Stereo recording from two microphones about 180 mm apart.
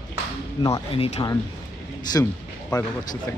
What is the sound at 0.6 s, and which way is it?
Speech, 25° left (ahead or behind).